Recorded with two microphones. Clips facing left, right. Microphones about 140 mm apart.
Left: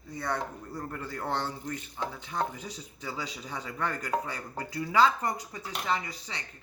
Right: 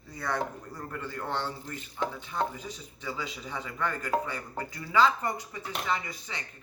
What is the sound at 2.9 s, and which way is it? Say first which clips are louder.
Speech: right 1 dB; 35° left (ahead or behind).